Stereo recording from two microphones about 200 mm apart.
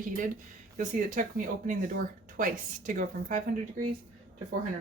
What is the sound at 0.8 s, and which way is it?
Speech, 40° right (ahead or behind).